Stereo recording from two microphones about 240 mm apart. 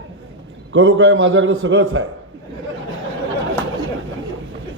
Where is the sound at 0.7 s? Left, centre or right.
Right.